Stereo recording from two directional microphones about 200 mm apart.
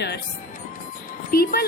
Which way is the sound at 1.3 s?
45° left (ahead or behind).